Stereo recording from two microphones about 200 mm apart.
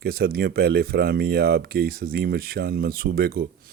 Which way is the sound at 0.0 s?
50° right (ahead or behind).